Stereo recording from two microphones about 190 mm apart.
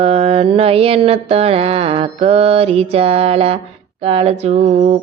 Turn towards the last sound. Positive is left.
turn(degrees=-35)  # may be behind; listen again after turning